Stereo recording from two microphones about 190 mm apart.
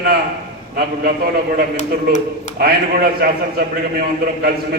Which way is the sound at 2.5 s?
50° right (ahead or behind).